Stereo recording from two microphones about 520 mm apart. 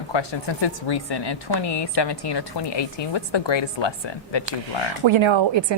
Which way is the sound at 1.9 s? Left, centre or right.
Left.